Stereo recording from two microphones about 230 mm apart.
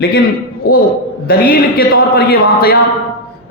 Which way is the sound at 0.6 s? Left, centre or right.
Left.